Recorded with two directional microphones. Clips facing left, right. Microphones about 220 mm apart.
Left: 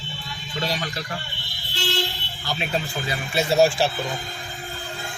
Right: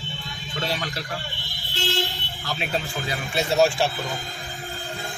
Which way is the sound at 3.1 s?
Centre (ahead or behind).